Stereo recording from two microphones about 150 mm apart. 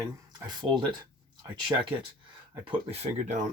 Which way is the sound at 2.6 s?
40° right (ahead or behind).